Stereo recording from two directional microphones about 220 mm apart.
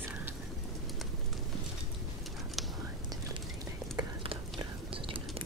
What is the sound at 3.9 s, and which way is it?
Whispering, 20° right (ahead or behind).